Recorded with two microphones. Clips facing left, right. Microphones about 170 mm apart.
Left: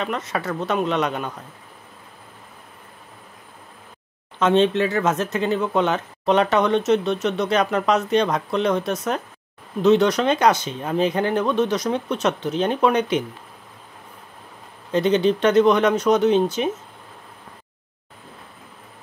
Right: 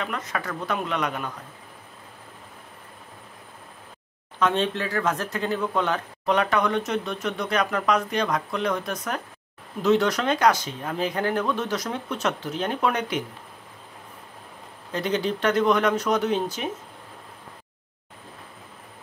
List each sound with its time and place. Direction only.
0.0 s speech: 25° left (ahead or behind)
4.4 s speech: 20° left (ahead or behind)
14.9 s speech: 20° left (ahead or behind)